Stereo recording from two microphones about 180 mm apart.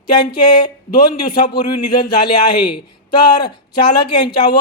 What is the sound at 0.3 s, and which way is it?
A man's voice, 25° left (ahead or behind).